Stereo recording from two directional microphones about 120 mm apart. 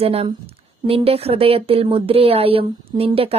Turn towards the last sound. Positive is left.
turn(degrees=-55)  # may be behind; listen again after turning